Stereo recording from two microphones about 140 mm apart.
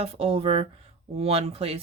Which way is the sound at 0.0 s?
45° right (ahead or behind).